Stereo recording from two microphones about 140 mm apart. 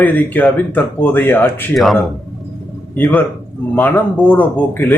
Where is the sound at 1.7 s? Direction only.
Centre (ahead or behind).